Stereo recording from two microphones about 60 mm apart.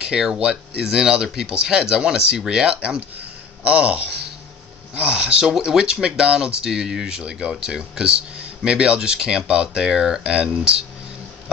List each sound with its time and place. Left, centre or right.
0.0 s speech: centre